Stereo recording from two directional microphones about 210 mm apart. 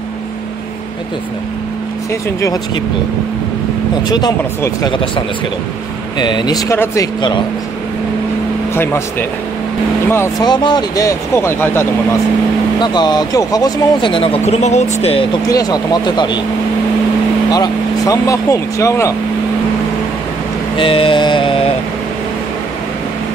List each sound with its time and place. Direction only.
4.1 s speech: 20° left (ahead or behind)
8.7 s speech: 10° left (ahead or behind)
10.1 s speech: 15° left (ahead or behind)
15.4 s speech: 15° left (ahead or behind)
17.5 s speech: 15° left (ahead or behind)
20.7 s mantra: 25° left (ahead or behind)